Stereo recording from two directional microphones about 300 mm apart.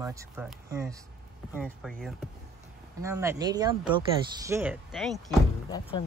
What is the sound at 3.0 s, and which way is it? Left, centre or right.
Speech, centre.